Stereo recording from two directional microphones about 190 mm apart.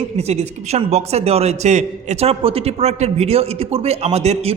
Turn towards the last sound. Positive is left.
turn(degrees=-35)  # may be behind; listen again after turning